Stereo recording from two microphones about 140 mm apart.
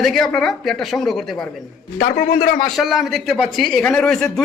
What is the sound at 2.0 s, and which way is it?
Speech, 75° left (ahead or behind).